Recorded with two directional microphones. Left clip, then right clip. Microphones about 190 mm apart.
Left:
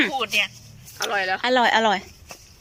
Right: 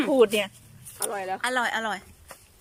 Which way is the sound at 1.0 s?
15° right (ahead or behind).